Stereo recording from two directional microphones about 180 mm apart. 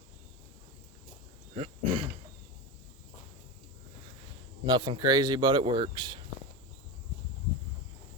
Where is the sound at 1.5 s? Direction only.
35° right (ahead or behind).